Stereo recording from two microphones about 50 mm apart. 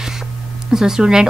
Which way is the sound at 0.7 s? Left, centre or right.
Centre.